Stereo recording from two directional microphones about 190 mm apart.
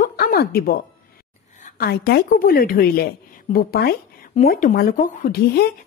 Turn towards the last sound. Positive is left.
turn(degrees=55)  # may be behind; listen again after turning